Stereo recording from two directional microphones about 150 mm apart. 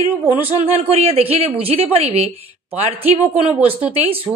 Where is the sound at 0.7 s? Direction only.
40° right (ahead or behind).